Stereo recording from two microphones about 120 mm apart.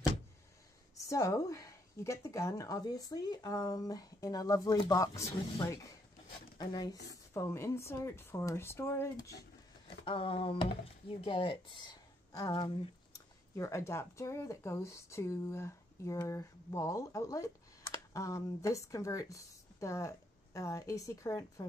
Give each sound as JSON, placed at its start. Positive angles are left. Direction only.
{"t": 1.0, "sound": "speech", "side_deg": 25}
{"t": 10.0, "sound": "speech", "side_deg": 50}